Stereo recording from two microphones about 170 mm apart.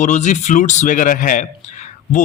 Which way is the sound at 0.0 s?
45° left (ahead or behind).